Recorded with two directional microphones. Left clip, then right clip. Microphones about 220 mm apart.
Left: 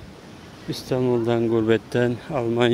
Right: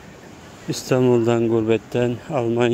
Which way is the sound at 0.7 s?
20° right (ahead or behind).